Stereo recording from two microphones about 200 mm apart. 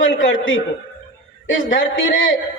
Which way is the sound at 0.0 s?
70° left (ahead or behind).